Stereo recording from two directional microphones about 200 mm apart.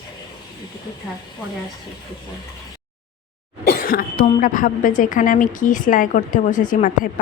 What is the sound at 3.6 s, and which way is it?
Speech, 45° left (ahead or behind).